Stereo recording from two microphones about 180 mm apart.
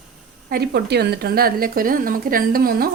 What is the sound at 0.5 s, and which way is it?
A woman's voice, 60° right (ahead or behind).